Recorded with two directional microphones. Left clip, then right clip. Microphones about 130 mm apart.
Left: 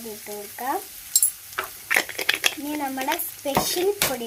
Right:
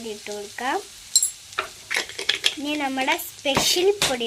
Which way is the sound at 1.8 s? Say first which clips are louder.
Left 4 dB; 65° left (ahead or behind).